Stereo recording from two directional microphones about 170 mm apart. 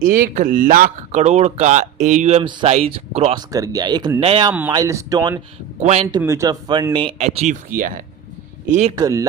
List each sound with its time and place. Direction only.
0.0 s speech: 50° right (ahead or behind)
2.4 s speech: 30° right (ahead or behind)
3.5 s speech: 20° right (ahead or behind)
4.7 s speech: 20° right (ahead or behind)
5.8 s speech: 40° right (ahead or behind)
6.1 s speech: 20° right (ahead or behind); by 7.5 s 40° right (ahead or behind)
7.8 s speech: 55° right (ahead or behind)
9.0 s speech: 20° right (ahead or behind)